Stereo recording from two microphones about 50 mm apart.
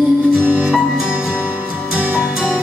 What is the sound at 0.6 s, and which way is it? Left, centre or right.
Music, centre.